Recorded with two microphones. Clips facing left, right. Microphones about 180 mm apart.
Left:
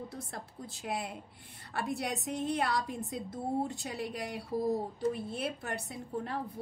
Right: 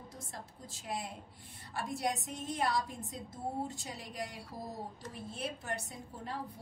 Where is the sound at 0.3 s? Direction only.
65° left (ahead or behind).